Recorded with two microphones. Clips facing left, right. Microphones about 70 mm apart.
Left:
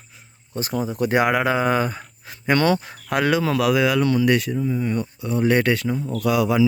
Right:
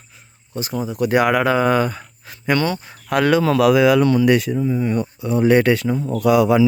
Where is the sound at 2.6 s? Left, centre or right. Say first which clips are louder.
Left 3 dB; left.